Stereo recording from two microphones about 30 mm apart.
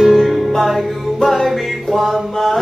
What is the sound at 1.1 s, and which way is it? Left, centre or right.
Music, centre.